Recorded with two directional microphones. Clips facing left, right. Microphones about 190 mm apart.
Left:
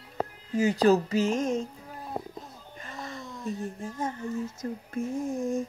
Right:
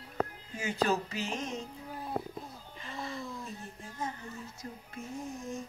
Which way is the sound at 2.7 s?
45° left (ahead or behind).